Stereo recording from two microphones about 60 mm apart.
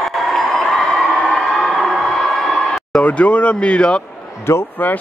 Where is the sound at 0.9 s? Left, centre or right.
Centre.